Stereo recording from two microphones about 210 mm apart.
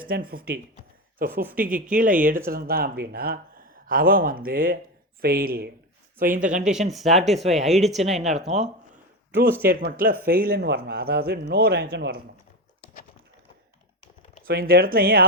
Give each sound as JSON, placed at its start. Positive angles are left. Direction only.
{"t": 0.1, "sound": "speech", "side_deg": -45}
{"t": 6.6, "sound": "speech", "side_deg": -5}
{"t": 8.0, "sound": "speech", "side_deg": -30}
{"t": 9.3, "sound": "speech", "side_deg": -10}
{"t": 9.6, "sound": "speech", "side_deg": -45}
{"t": 14.4, "sound": "speech", "side_deg": -45}